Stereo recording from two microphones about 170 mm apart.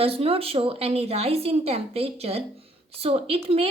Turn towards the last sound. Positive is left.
turn(degrees=-35)  # may be behind; listen again after turning